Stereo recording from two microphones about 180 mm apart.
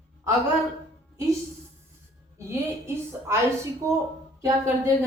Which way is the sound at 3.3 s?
15° right (ahead or behind).